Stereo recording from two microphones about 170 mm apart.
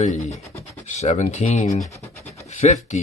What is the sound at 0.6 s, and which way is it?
Speech, 40° left (ahead or behind).